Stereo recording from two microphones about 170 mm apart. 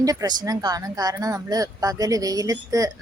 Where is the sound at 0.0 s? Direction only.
20° right (ahead or behind).